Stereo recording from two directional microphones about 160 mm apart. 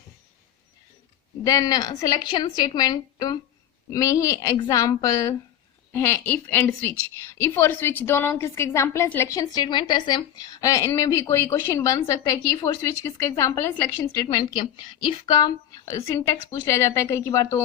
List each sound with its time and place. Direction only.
1.5 s a woman's voice: 25° left (ahead or behind)
14.5 s a woman's voice: 30° left (ahead or behind)